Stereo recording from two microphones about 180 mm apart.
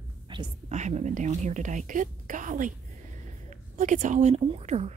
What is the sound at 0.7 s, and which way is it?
A woman's voice, 40° right (ahead or behind).